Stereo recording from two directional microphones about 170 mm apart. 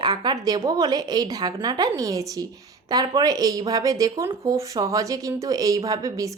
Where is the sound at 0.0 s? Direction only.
25° right (ahead or behind).